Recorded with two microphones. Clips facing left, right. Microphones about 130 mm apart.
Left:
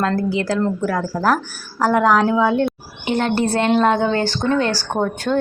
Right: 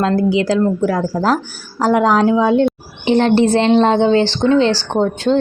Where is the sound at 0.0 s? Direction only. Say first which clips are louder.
Right 5 dB; 15° right (ahead or behind).